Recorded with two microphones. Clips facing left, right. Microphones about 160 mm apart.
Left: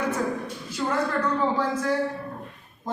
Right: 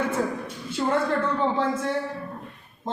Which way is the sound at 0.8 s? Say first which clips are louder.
Right 2 dB; 30° right (ahead or behind).